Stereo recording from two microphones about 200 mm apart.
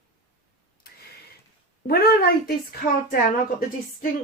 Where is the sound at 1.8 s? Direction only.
50° left (ahead or behind).